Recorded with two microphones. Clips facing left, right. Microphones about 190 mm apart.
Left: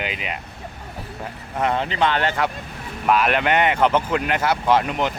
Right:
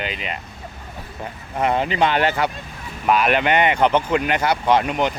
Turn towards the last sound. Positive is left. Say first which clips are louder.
# right 1 dB
turn(degrees=0)  # may be behind; listen again after turning